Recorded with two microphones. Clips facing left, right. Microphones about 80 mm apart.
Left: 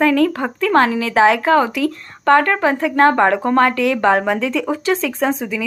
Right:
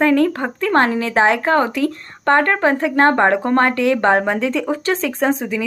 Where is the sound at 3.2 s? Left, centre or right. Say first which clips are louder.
Left 1 dB; right.